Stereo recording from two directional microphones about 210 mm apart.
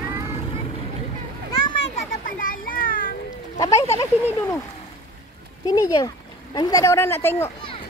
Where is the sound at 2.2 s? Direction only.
40° left (ahead or behind).